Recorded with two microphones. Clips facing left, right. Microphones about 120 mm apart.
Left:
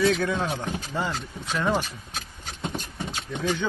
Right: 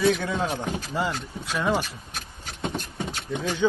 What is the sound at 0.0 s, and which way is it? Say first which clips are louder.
Speech: even; 10° right (ahead or behind).